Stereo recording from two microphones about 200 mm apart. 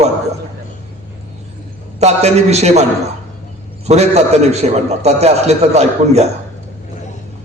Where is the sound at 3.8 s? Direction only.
35° right (ahead or behind).